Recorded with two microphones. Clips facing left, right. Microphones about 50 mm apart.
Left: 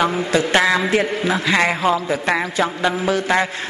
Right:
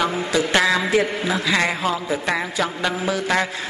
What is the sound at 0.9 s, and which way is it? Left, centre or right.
A man's voice, left.